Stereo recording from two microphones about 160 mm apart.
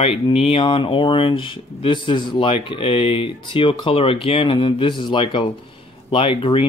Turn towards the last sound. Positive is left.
turn(degrees=35)  # may be behind; listen again after turning